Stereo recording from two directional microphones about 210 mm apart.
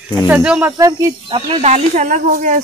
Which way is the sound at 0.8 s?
15° right (ahead or behind).